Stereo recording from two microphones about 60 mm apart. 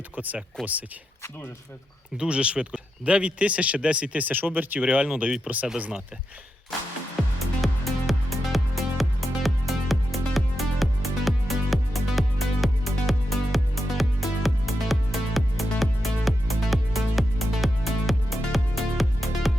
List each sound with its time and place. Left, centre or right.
0.2 s speech: right
2.1 s speech: centre
7.6 s music: centre